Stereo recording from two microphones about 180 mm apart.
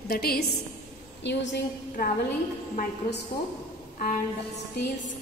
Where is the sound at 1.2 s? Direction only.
75° left (ahead or behind).